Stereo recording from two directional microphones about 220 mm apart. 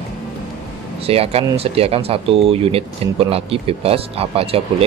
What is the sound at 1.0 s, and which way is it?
Speech, 25° right (ahead or behind).